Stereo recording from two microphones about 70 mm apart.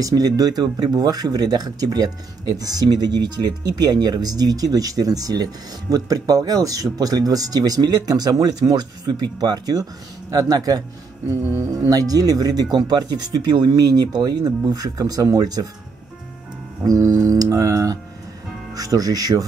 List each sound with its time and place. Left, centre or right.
0.0 s speech: right
11.2 s speech: right
11.9 s speech: right
12.7 s speech: right
16.8 s speech: right